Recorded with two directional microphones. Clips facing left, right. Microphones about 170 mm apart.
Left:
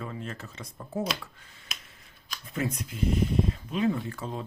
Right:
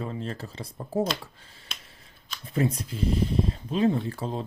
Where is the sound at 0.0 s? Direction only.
30° right (ahead or behind).